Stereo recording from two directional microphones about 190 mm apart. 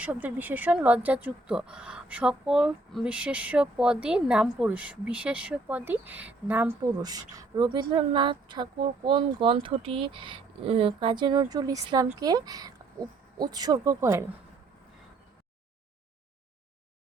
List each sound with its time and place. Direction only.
0.0 s speech: 5° right (ahead or behind)